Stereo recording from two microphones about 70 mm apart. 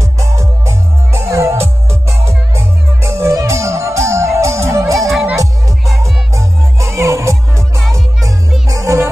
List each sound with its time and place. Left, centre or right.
0.0 s music: right
5.9 s music: centre
6.3 s music: right